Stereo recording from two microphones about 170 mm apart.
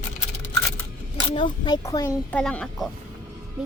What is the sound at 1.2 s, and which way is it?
A child's voice, 25° left (ahead or behind).